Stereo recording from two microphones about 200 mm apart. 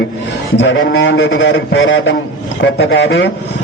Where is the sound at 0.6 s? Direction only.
70° left (ahead or behind).